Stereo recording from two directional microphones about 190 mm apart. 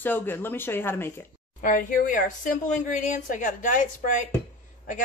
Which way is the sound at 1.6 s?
45° left (ahead or behind).